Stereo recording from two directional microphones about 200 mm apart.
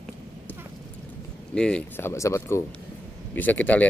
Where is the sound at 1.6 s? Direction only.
5° left (ahead or behind).